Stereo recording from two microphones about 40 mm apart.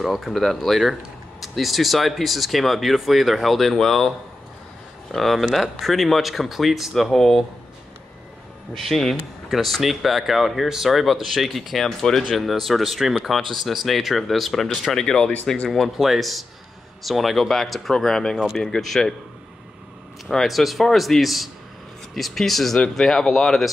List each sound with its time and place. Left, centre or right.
0.3 s speech: centre
5.1 s speech: centre
8.7 s speech: centre
14.9 s speech: centre
16.0 s speech: centre
17.9 s speech: centre
20.2 s speech: centre